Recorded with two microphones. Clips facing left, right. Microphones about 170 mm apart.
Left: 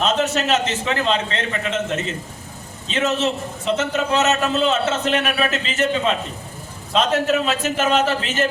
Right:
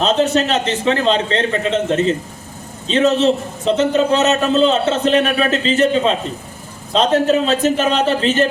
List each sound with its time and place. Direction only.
0.0 s a man's voice: 35° right (ahead or behind)